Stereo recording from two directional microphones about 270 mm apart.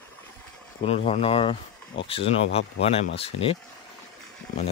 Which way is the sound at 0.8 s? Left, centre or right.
Left.